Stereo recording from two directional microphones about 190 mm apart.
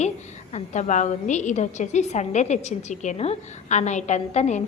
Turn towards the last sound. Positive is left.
turn(degrees=35)  # may be behind; listen again after turning